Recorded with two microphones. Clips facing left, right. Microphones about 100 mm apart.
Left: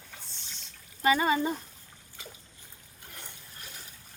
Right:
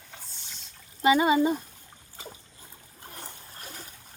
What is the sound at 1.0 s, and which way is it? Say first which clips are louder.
Speech: right 4 dB; 15° right (ahead or behind).